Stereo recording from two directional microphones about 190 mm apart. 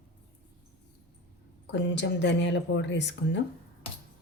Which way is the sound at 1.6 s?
65° left (ahead or behind).